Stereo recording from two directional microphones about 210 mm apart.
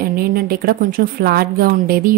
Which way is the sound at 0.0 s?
45° right (ahead or behind).